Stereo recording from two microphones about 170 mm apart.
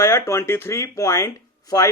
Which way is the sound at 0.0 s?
15° left (ahead or behind).